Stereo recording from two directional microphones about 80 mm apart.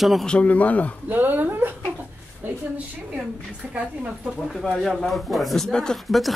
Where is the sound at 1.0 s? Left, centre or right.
Right.